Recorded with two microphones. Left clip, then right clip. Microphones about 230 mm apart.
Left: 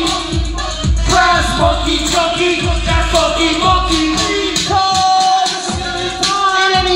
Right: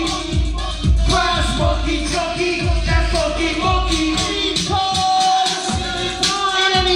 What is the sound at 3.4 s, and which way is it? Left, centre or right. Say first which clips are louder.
Music: left 6 dB; left.